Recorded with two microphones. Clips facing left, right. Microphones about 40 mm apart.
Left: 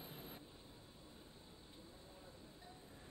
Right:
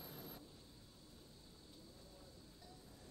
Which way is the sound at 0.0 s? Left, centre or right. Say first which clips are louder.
Even; left.